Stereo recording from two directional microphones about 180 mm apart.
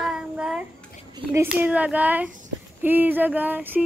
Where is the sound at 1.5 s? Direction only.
5° right (ahead or behind).